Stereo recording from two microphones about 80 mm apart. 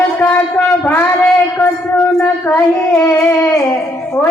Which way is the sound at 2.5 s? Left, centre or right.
Left.